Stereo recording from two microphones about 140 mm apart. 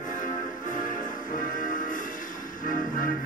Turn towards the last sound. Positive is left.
turn(degrees=75)  # may be behind; listen again after turning